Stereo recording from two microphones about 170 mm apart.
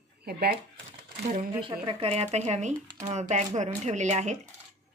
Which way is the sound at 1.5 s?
30° right (ahead or behind).